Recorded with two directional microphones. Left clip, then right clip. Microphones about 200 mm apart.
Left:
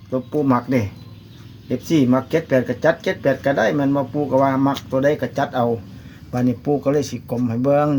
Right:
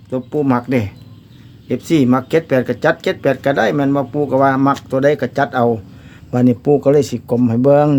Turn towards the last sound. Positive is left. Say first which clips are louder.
# right 6 dB
turn(degrees=-55)  # may be behind; listen again after turning